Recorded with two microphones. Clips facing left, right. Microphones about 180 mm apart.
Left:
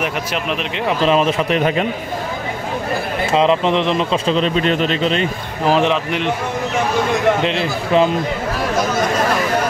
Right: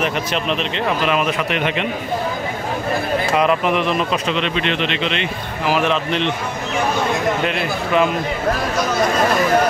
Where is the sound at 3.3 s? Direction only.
25° left (ahead or behind).